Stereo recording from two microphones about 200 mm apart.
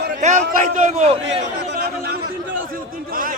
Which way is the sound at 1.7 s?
55° right (ahead or behind).